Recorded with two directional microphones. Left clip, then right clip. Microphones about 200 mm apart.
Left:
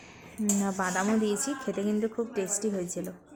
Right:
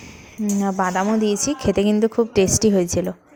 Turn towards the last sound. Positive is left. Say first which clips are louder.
# right 14 dB
turn(degrees=-35)  # may be behind; listen again after turning